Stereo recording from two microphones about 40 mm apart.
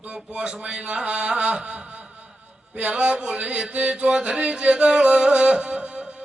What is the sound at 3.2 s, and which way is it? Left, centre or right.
Music, right.